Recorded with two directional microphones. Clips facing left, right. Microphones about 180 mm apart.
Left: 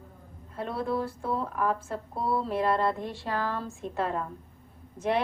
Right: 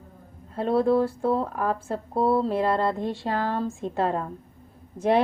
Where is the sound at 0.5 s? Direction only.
30° right (ahead or behind).